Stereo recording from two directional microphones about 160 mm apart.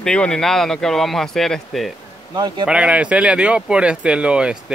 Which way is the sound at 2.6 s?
5° right (ahead or behind).